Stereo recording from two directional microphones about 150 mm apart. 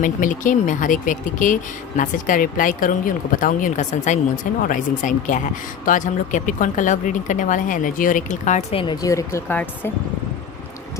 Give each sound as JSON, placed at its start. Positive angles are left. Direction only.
{"t": 0.0, "sound": "speech", "side_deg": 60}
{"t": 8.7, "sound": "speech", "side_deg": 35}